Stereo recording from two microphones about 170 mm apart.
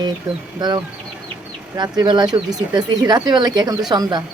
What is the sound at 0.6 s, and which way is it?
A woman's voice, 25° right (ahead or behind).